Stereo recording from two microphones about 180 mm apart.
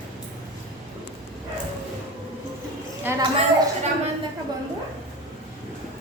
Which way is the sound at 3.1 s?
10° right (ahead or behind).